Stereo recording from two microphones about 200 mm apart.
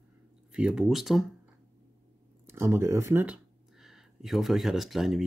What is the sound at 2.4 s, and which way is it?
Speech, 10° right (ahead or behind).